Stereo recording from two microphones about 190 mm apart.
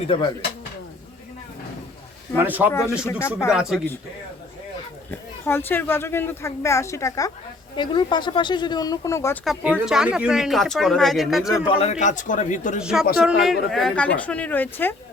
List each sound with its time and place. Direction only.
0.1 s speech: 25° left (ahead or behind)
2.4 s speech: 10° right (ahead or behind)
3.1 s a woman's voice: 15° left (ahead or behind)
3.5 s speech: centre (ahead or behind)
5.5 s a woman's voice: 10° left (ahead or behind)
9.4 s speech: centre (ahead or behind)
11.8 s a man's voice: 40° left (ahead or behind)
12.8 s a woman's voice: 5° right (ahead or behind)